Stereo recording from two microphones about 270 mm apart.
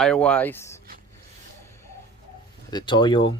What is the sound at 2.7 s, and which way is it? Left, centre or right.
Speech, centre.